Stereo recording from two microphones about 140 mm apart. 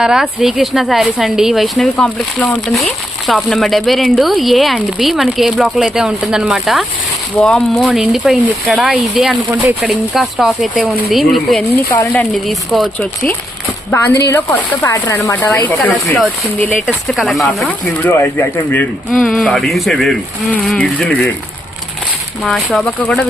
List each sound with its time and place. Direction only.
0.0 s speech: 5° right (ahead or behind)
7.9 s speech: 5° right (ahead or behind)
9.5 s speech: 15° right (ahead or behind)
9.9 s speech: centre (ahead or behind)
11.9 s speech: 15° left (ahead or behind)
12.2 s speech: centre (ahead or behind)
13.9 s speech: 20° left (ahead or behind)
16.8 s speech: 5° right (ahead or behind)
22.4 s speech: centre (ahead or behind)